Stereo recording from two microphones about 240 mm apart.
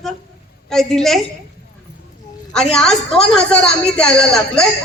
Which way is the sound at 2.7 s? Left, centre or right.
Centre.